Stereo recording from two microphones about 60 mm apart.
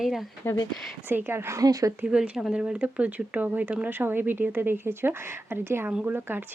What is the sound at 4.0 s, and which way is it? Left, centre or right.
Speech, right.